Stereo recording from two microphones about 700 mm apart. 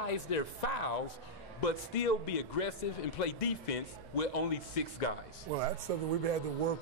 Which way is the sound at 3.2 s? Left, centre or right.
Left.